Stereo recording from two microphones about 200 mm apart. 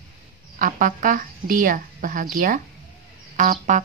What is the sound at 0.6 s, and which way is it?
A woman's voice, 40° right (ahead or behind).